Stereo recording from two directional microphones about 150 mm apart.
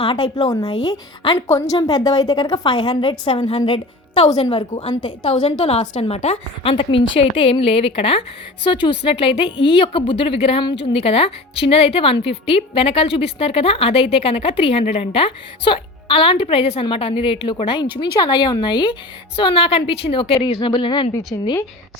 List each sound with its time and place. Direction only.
0.0 s a woman's voice: 35° left (ahead or behind)
5.3 s a woman's voice: 50° left (ahead or behind); by 21.1 s 35° left (ahead or behind)
21.3 s a woman's voice: 20° left (ahead or behind)